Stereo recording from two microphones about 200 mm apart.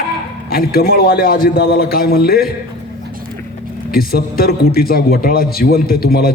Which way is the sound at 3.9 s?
50° left (ahead or behind).